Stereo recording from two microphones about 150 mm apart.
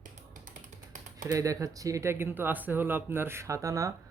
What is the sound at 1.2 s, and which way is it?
Speech, 20° right (ahead or behind).